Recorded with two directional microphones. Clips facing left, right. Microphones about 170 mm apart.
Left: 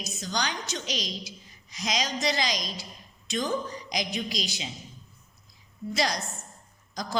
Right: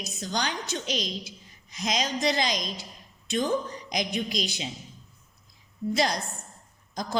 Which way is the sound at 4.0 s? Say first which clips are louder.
Right 3 dB; 55° right (ahead or behind).